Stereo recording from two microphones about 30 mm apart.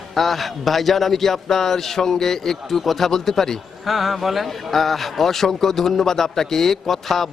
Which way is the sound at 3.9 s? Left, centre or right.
Centre.